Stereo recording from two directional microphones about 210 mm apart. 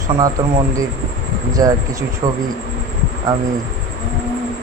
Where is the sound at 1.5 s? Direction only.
15° right (ahead or behind).